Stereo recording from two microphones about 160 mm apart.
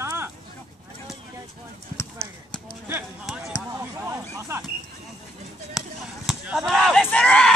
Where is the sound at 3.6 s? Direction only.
20° right (ahead or behind).